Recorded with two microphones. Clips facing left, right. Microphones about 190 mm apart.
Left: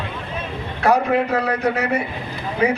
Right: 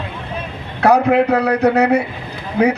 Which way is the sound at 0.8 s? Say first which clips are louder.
Right 5 dB; 70° right (ahead or behind).